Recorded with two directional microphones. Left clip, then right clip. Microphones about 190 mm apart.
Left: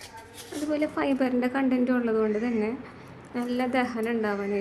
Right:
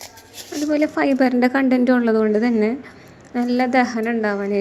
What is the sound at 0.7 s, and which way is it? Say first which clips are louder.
A woman's voice: right 8 dB; 30° right (ahead or behind).